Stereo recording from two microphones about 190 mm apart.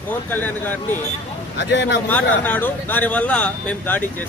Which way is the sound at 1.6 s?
65° left (ahead or behind).